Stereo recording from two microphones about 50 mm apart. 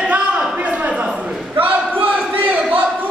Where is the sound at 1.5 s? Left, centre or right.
Right.